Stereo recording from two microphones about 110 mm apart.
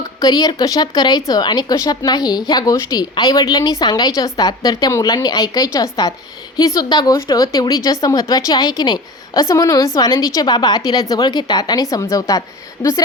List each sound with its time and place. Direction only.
0.2 s a woman's voice: 35° left (ahead or behind)